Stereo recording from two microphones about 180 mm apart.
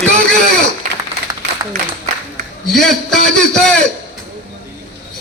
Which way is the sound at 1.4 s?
80° right.